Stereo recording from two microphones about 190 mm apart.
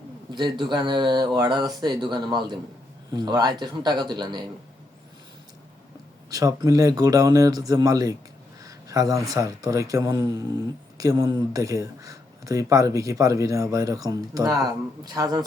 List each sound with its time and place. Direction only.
0.3 s speech: 25° right (ahead or behind)
6.3 s speech: 20° right (ahead or behind)